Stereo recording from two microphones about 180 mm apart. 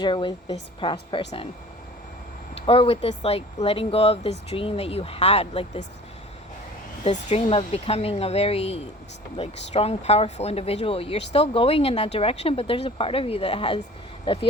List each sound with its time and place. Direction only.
0.0 s a woman's voice: 25° left (ahead or behind)
2.6 s speech: 30° left (ahead or behind)
7.0 s a woman's voice: 35° left (ahead or behind)